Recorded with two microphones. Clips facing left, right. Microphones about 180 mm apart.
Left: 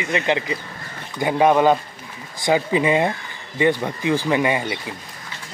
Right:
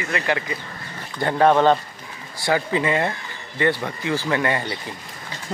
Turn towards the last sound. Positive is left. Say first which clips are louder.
# left 3 dB
turn(degrees=15)  # may be behind; listen again after turning